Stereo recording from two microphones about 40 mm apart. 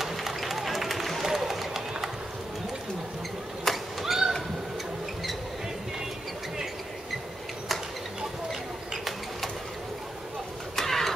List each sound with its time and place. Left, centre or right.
0.0 s run: centre
3.6 s cat: centre
8.5 s bird: centre
10.8 s a sound: centre